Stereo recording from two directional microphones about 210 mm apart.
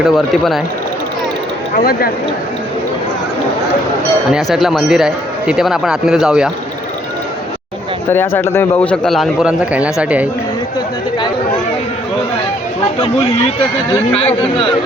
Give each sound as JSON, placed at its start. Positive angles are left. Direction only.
{"t": 0.0, "sound": "speech", "side_deg": 0}
{"t": 1.7, "sound": "speech", "side_deg": 45}
{"t": 4.3, "sound": "speech", "side_deg": 0}
{"t": 8.1, "sound": "speech", "side_deg": 10}
{"t": 13.9, "sound": "speech", "side_deg": 10}